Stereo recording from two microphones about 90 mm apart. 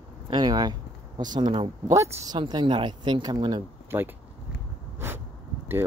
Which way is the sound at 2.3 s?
55° right (ahead or behind).